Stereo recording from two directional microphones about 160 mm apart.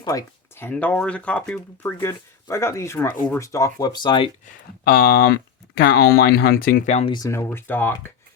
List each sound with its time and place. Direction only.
0.0 s speech: 20° left (ahead or behind)
4.8 s speech: 70° left (ahead or behind)
6.9 s speech: 35° left (ahead or behind)
7.2 s speech: 15° left (ahead or behind)